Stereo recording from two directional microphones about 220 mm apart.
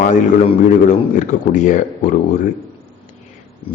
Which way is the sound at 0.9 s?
35° left (ahead or behind).